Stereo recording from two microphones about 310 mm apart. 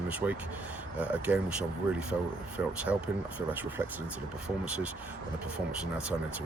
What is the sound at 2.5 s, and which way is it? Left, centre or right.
Speech, centre.